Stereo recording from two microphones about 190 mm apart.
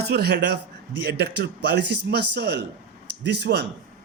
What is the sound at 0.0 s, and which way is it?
Speech, 60° right (ahead or behind).